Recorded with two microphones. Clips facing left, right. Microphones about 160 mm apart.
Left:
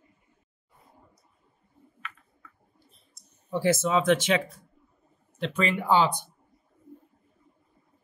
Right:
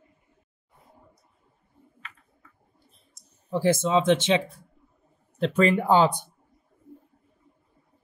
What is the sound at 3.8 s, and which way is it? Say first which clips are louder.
Speech: right 2 dB; 20° right (ahead or behind).